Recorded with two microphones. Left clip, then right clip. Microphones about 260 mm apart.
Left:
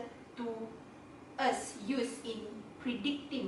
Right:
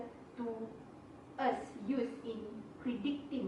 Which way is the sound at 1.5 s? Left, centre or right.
Centre.